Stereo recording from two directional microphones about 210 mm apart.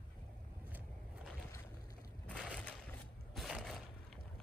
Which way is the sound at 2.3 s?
5° left (ahead or behind).